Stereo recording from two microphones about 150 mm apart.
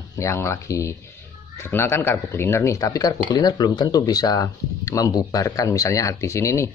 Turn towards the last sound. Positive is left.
turn(degrees=20)  # may be behind; listen again after turning